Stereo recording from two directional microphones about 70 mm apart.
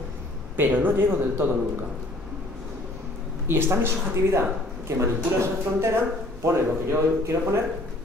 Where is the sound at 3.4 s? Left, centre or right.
Right.